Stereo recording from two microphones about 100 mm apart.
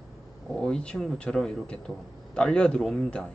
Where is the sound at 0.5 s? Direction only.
10° left (ahead or behind).